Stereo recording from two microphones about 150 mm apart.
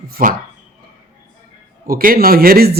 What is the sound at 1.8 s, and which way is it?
Speech, 75° right (ahead or behind).